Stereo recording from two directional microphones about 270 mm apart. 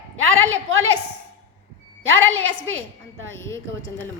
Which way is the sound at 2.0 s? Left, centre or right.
Right.